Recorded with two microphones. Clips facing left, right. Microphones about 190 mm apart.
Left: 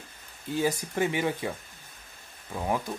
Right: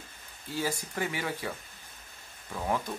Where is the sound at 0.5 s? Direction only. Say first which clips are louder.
Left 5 dB; 20° left (ahead or behind).